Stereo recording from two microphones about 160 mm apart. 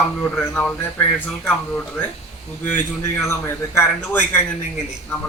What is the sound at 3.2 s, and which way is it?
Speech, 15° left (ahead or behind).